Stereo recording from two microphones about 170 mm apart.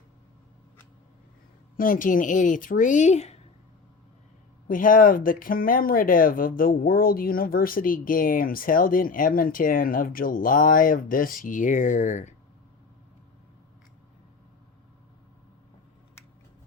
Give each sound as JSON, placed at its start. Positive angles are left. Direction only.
{"t": 1.7, "sound": "speech", "side_deg": 55}
{"t": 4.7, "sound": "speech", "side_deg": 55}